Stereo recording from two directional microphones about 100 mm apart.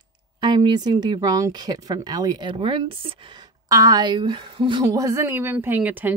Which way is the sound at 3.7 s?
35° right (ahead or behind).